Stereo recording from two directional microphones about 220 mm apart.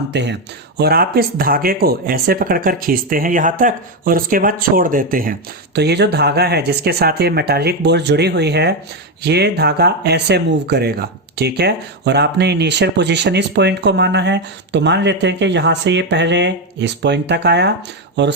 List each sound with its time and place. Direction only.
0.1 s speech: 50° right (ahead or behind)